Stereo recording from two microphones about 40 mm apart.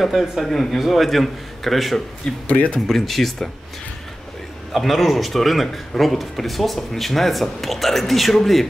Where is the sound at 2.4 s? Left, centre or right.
Left.